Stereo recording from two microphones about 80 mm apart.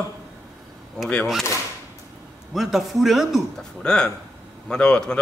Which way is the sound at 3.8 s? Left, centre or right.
Centre.